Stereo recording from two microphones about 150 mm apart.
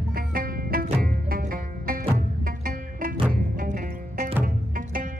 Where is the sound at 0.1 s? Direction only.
75° right (ahead or behind).